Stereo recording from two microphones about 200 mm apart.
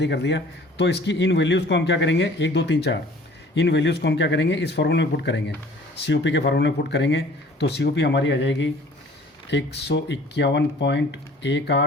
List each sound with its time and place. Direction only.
0.0 s a man's voice: 60° left (ahead or behind)